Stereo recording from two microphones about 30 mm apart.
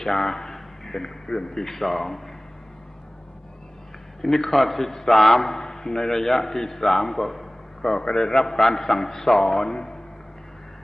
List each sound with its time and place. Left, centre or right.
0.2 s a man's voice: centre
4.2 s a man's voice: centre